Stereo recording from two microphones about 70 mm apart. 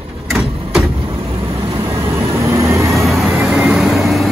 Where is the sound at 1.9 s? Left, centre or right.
Right.